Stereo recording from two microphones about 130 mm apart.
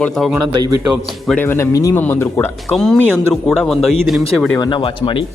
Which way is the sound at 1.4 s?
20° left (ahead or behind).